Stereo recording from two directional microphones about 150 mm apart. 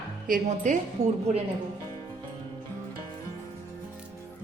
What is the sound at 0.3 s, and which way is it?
Speech, 55° right (ahead or behind).